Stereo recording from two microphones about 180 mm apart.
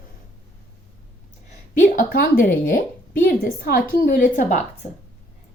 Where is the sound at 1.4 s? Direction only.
45° left (ahead or behind).